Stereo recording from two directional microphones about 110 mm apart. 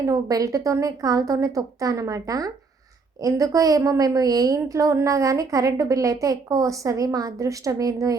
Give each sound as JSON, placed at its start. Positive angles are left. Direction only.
{"t": 0.0, "sound": "a woman's voice", "side_deg": -30}